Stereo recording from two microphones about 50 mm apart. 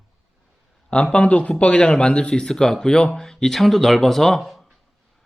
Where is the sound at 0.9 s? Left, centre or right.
Left; by 4.6 s centre.